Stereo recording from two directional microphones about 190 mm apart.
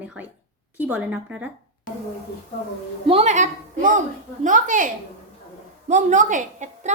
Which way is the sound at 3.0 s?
35° right (ahead or behind).